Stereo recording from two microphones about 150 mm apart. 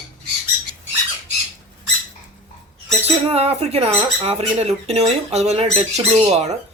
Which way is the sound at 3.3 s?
45° right (ahead or behind).